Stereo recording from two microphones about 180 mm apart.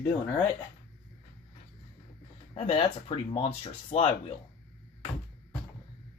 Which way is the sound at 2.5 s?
35° left (ahead or behind).